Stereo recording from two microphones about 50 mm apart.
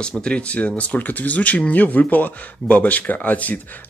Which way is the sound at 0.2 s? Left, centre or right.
Left.